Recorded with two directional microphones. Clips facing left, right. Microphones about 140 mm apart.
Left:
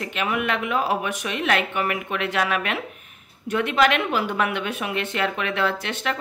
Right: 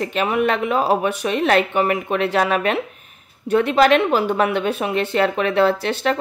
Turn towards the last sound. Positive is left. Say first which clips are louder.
# right 7 dB
turn(degrees=-35)  # may be behind; listen again after turning